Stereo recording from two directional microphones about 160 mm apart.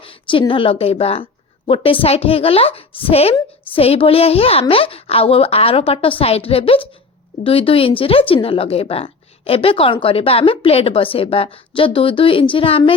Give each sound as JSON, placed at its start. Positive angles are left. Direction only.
{"t": 0.0, "sound": "a woman's voice", "side_deg": 35}